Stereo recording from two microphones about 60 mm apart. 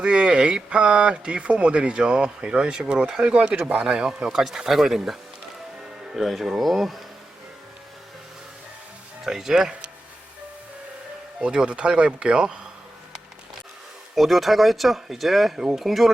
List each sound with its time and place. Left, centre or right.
0.0 s speech: centre
3.8 s speech: centre
6.1 s speech: centre
9.2 s speech: centre
11.3 s speech: centre
14.2 s speech: centre